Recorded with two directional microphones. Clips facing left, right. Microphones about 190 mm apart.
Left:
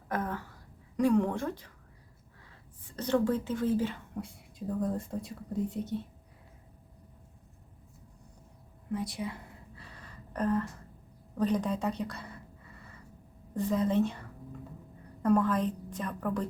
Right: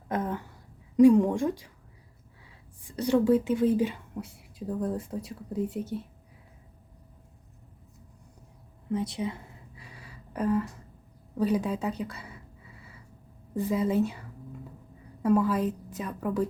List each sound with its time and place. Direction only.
0.1 s a sound: 20° right (ahead or behind)
0.9 s a woman's voice: 15° right (ahead or behind)
2.8 s a woman's voice: 10° right (ahead or behind)
4.2 s speech: 5° right (ahead or behind)
8.9 s speech: 20° right (ahead or behind)
9.7 s a sound: 10° right (ahead or behind)
13.7 s a woman's voice: 5° right (ahead or behind)